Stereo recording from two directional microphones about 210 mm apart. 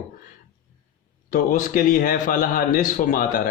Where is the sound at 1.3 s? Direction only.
40° left (ahead or behind).